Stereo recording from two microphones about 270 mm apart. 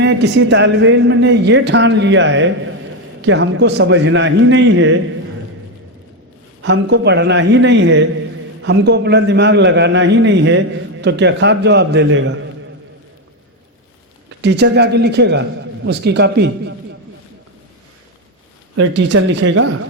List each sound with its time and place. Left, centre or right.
0.0 s a man's voice: right
6.6 s speech: right
14.3 s speech: right
18.8 s speech: right
19.4 s speech: right